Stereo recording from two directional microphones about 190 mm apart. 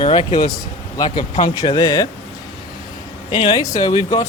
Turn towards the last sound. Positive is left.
turn(degrees=20)  # may be behind; listen again after turning